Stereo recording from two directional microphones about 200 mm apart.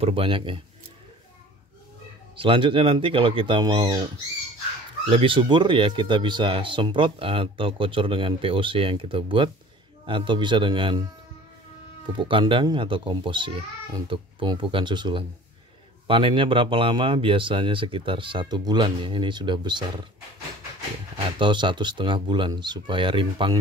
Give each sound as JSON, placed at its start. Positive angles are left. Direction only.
{"t": 0.0, "sound": "speech", "side_deg": -25}
{"t": 2.3, "sound": "speech", "side_deg": -25}
{"t": 5.1, "sound": "speech", "side_deg": -25}
{"t": 12.1, "sound": "speech", "side_deg": -25}
{"t": 21.4, "sound": "speech", "side_deg": -25}